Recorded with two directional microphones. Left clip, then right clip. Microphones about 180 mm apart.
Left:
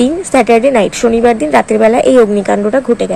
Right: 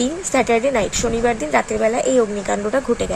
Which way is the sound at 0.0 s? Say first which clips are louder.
Left 8 dB; 15° left (ahead or behind).